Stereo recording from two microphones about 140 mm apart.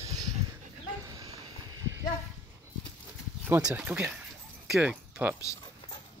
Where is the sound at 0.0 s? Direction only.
25° right (ahead or behind).